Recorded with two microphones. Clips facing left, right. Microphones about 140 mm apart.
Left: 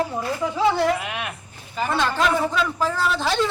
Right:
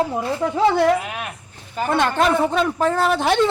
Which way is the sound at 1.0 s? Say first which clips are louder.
Even; 40° right (ahead or behind).